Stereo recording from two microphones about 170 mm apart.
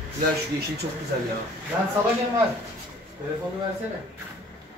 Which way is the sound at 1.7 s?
20° right (ahead or behind).